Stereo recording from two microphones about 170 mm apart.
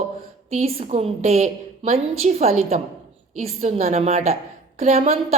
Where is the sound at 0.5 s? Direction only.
35° right (ahead or behind).